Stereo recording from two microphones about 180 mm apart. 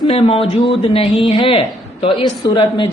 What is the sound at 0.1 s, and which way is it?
A man's voice, 30° left (ahead or behind).